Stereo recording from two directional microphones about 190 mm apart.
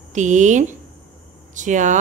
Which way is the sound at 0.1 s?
40° right (ahead or behind).